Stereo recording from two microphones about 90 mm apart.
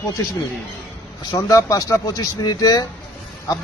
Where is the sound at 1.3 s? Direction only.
40° left (ahead or behind).